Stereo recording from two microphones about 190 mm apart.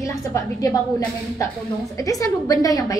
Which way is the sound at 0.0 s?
15° left (ahead or behind).